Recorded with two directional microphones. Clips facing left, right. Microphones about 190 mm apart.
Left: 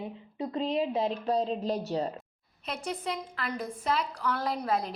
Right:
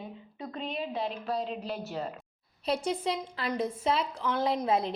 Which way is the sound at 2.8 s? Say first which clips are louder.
Right 3 dB; 30° right (ahead or behind).